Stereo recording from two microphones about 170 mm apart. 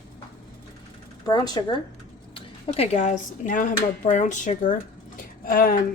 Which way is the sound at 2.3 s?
40° left (ahead or behind).